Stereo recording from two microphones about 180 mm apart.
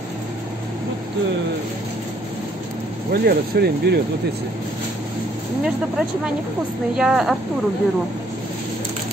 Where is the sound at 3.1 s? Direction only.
60° right (ahead or behind).